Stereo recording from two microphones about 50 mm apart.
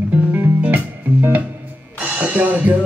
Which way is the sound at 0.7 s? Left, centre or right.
Right.